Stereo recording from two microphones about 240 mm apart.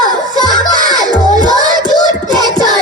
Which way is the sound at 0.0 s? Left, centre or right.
Centre.